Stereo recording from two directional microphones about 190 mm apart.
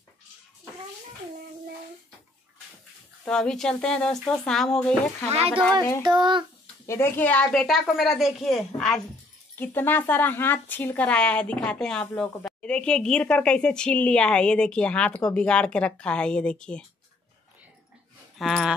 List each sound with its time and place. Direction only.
3.3 s a woman's voice: 5° left (ahead or behind)
5.3 s a child's voice: 35° right (ahead or behind)
6.9 s a woman's voice: 10° left (ahead or behind)
18.4 s a woman's voice: centre (ahead or behind)